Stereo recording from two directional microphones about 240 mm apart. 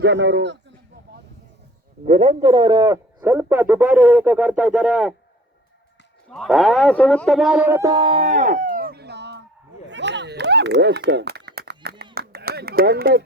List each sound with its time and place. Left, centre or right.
0.0 s a man's voice: right
2.0 s a man's voice: right; by 5.1 s centre
6.3 s speech: centre; by 9.4 s right
9.9 s a sound: right